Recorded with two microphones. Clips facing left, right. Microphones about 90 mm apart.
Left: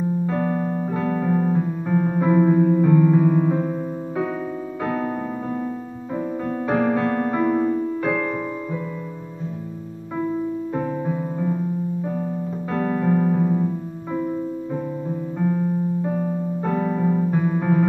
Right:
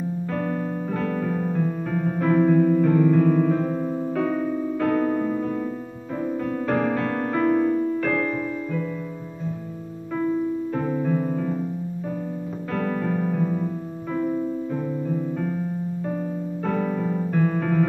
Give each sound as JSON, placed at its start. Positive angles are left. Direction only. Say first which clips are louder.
{"t": 0.3, "sound": "music", "louder": "left 3 dB", "side_deg": 10}
{"t": 4.8, "sound": "piano", "louder": "right 3 dB", "side_deg": 10}
{"t": 6.7, "sound": "music", "louder": "left 4 dB", "side_deg": 10}
{"t": 10.7, "sound": "music", "louder": "right 1 dB", "side_deg": 15}
{"t": 12.7, "sound": "piano", "louder": "left 4 dB", "side_deg": 20}
{"t": 14.1, "sound": "music", "louder": "even", "side_deg": 10}
{"t": 15.3, "sound": "piano", "louder": "left 5 dB", "side_deg": 10}
{"t": 16.6, "sound": "music", "louder": "left 2 dB", "side_deg": 20}